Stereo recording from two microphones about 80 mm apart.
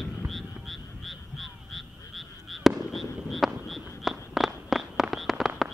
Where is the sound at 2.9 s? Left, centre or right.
Centre.